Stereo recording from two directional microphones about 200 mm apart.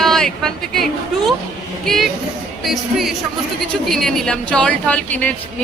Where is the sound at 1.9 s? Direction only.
Centre (ahead or behind).